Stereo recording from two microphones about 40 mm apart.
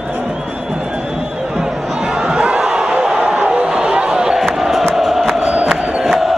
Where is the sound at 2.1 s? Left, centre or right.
Right.